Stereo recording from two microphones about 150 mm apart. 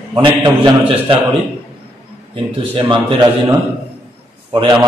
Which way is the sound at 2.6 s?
35° right (ahead or behind).